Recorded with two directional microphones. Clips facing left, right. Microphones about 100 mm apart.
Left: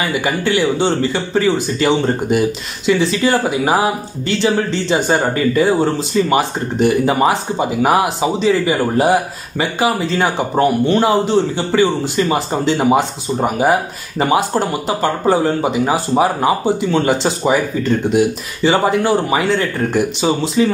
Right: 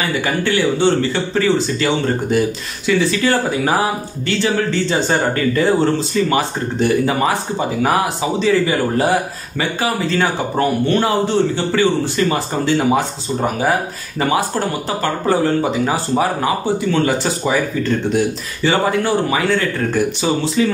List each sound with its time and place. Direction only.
0.1 s speech: 15° left (ahead or behind)